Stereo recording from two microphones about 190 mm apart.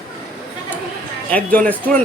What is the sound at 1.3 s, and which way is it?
Speech, 5° left (ahead or behind).